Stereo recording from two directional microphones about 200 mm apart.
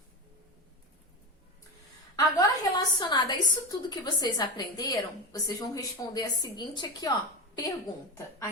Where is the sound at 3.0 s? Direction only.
20° left (ahead or behind).